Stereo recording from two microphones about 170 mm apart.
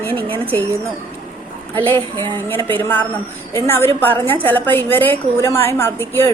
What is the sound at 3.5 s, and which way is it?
A woman's voice, 15° left (ahead or behind).